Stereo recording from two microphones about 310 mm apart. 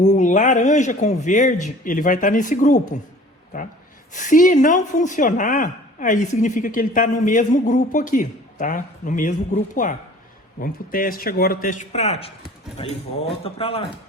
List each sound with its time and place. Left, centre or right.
0.0 s a woman's voice: left
4.1 s a woman's voice: left